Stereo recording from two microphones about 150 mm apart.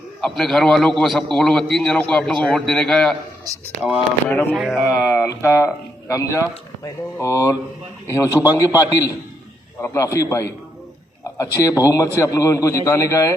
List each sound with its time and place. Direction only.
0.2 s a man's voice: 5° left (ahead or behind)
4.3 s speech: 10° left (ahead or behind)
4.5 s a man's voice: 5° right (ahead or behind)
4.9 s speech: 20° left (ahead or behind)